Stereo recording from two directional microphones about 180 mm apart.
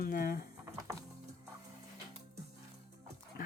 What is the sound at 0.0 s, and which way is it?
Speech, 55° left (ahead or behind).